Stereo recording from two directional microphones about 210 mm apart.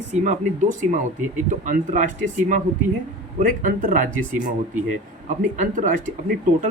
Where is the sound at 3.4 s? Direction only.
40° right (ahead or behind).